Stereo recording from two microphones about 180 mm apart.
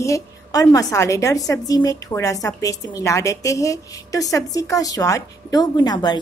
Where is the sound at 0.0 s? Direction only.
20° left (ahead or behind).